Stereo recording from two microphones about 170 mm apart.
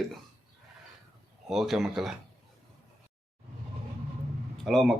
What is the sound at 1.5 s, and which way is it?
Speech, centre (ahead or behind).